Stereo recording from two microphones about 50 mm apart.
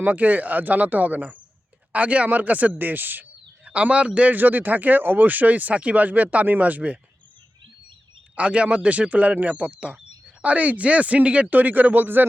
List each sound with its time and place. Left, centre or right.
0.0 s speech: right
3.6 s a man's voice: right
4.4 s speech: right
8.4 s speech: right